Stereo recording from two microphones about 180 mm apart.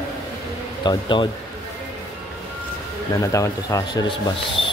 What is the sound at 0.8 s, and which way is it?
Speech, 25° left (ahead or behind).